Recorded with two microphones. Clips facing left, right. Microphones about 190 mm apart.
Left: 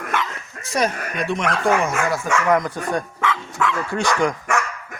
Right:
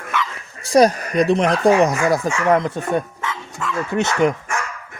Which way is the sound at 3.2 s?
70° left (ahead or behind).